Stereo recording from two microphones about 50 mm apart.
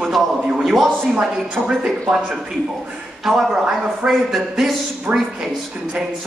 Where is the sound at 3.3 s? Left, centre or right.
Centre.